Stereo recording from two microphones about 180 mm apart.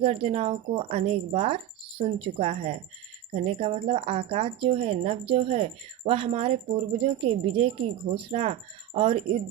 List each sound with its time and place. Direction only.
0.0 s speech: 30° right (ahead or behind)